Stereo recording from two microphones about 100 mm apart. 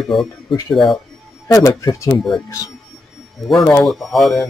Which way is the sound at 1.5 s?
35° left (ahead or behind).